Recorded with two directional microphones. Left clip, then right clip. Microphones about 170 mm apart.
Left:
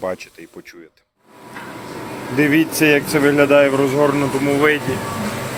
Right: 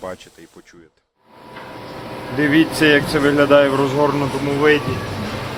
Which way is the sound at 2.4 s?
10° left (ahead or behind).